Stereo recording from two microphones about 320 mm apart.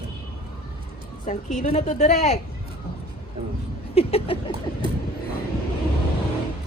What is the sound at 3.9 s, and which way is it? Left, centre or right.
Speech, centre.